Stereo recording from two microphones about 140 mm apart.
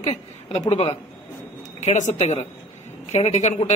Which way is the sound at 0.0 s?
50° left (ahead or behind).